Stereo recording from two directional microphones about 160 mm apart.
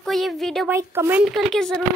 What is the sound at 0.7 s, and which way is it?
Speech, 15° right (ahead or behind).